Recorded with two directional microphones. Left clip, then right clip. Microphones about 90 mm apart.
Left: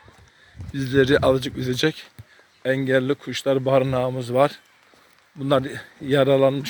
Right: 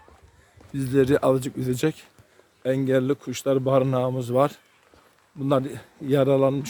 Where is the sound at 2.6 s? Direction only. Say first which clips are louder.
Left 2 dB; 5° right (ahead or behind); by 4.6 s 20° right (ahead or behind).